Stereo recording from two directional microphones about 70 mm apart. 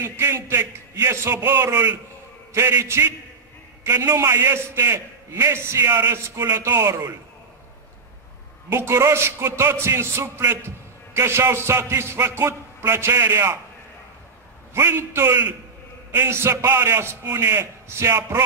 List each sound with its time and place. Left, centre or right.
0.0 s a man's voice: right
5.9 s a man's voice: right
8.6 s a man's voice: right
14.7 s a man's voice: right